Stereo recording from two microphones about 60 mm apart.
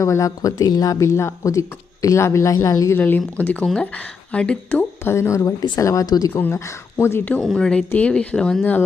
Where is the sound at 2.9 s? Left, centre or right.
Left.